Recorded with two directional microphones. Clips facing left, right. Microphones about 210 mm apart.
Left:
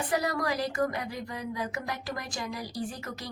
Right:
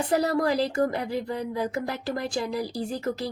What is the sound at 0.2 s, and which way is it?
A woman's voice, 30° right (ahead or behind).